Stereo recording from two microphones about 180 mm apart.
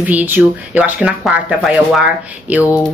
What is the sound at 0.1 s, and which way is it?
Speech, 10° right (ahead or behind).